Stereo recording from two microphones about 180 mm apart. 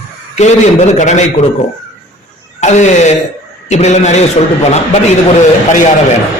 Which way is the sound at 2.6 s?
40° left (ahead or behind).